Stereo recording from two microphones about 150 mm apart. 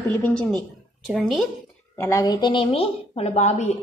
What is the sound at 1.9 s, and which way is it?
A woman's voice, 20° left (ahead or behind).